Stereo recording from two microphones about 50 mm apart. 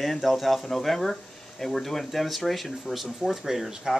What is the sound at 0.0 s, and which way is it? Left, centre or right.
Speech, centre.